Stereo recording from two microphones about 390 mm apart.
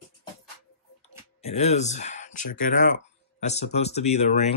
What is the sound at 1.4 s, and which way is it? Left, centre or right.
Speech, centre.